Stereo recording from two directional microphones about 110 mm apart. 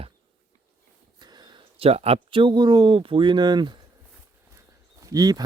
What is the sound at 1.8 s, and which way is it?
Speech, 65° right (ahead or behind).